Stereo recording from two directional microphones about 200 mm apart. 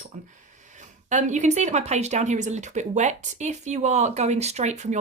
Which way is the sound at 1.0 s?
40° right (ahead or behind).